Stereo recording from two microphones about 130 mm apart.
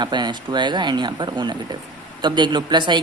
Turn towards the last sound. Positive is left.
turn(degrees=-35)  # may be behind; listen again after turning